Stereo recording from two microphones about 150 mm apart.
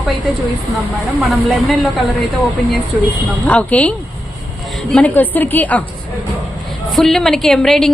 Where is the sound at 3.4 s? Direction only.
10° left (ahead or behind).